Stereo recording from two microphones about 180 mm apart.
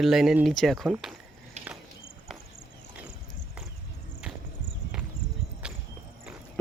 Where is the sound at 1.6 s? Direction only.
40° right (ahead or behind).